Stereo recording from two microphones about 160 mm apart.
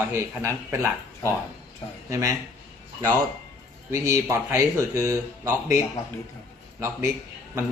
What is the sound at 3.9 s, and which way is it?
Speech, 20° right (ahead or behind).